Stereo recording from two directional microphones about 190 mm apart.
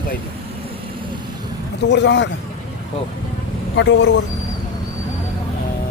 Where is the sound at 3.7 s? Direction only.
70° left (ahead or behind).